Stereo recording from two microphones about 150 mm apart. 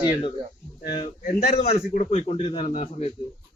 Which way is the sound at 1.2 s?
75° left (ahead or behind).